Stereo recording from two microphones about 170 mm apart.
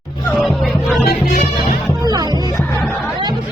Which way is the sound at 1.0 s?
65° left (ahead or behind).